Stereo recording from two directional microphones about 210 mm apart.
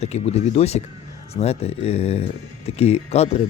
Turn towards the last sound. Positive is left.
turn(degrees=30)  # may be behind; listen again after turning